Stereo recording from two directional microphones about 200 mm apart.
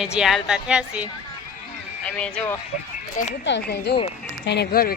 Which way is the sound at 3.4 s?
60° left (ahead or behind).